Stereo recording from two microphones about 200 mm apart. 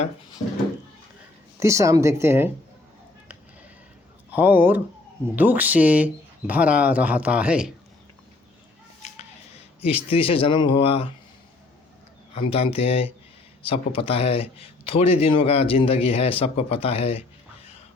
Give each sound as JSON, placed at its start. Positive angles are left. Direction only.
{"t": 1.5, "sound": "speech", "side_deg": -15}
{"t": 4.4, "sound": "speech", "side_deg": -10}
{"t": 9.0, "sound": "scissors", "side_deg": 35}
{"t": 9.8, "sound": "a man's voice", "side_deg": 30}
{"t": 12.5, "sound": "a man's voice", "side_deg": 30}